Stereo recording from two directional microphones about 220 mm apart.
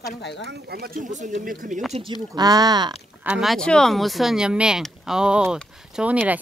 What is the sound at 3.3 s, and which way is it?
Speech, centre (ahead or behind).